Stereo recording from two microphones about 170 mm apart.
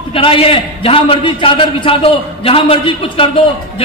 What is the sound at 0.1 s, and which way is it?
A man's voice, 30° left (ahead or behind).